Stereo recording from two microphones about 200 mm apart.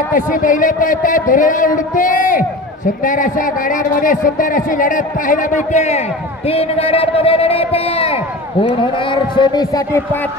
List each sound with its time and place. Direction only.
0.1 s a man's voice: 40° left (ahead or behind)
3.9 s a man's voice: 45° left (ahead or behind); by 10.0 s 20° left (ahead or behind)